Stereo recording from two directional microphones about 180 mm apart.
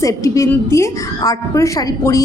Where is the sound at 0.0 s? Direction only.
15° left (ahead or behind).